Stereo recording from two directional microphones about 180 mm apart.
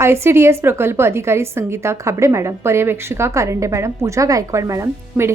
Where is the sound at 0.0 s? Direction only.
15° right (ahead or behind).